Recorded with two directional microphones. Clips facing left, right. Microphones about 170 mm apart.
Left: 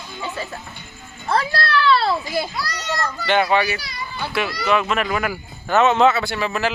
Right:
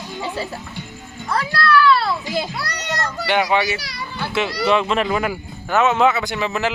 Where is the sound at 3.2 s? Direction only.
15° right (ahead or behind).